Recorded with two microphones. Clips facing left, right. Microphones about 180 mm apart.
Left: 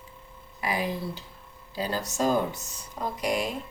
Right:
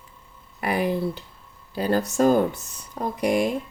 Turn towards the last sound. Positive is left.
turn(degrees=-55)  # may be behind; listen again after turning